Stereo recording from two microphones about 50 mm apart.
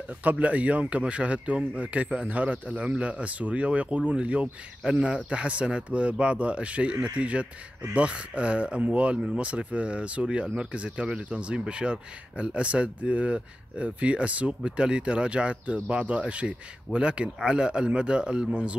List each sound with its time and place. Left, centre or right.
0.2 s speech: right